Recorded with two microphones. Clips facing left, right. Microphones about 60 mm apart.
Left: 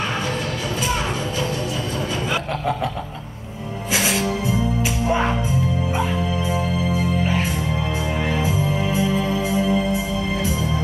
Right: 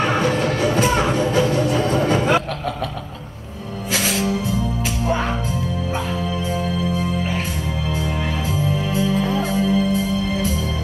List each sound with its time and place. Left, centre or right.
0.7 s music: right
2.0 s a sound: right
5.0 s music: centre
6.5 s music: centre
8.3 s music: centre